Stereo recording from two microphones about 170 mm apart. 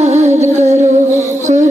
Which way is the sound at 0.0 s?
40° right (ahead or behind).